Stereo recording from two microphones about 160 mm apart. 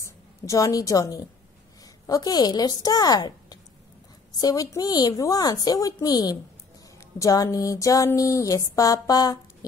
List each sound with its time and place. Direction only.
0.0 s a woman's voice: 20° left (ahead or behind)
2.0 s music: 25° left (ahead or behind)